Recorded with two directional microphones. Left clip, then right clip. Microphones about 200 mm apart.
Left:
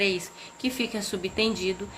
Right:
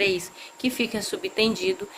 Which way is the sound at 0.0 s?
25° right (ahead or behind).